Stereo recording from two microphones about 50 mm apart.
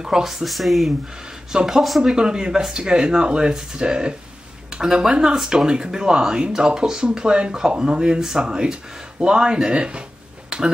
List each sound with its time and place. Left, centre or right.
0.0 s speech: centre
1.5 s speech: centre
2.1 s speech: centre